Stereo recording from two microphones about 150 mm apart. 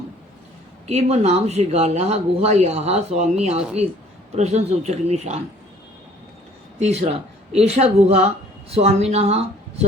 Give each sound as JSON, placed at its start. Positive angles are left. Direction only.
{"t": 0.9, "sound": "speech", "side_deg": -45}
{"t": 6.7, "sound": "speech", "side_deg": -45}